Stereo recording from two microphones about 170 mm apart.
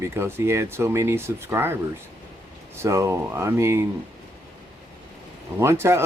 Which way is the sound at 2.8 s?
15° right (ahead or behind).